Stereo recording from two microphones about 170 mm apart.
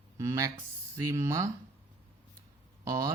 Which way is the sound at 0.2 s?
20° right (ahead or behind).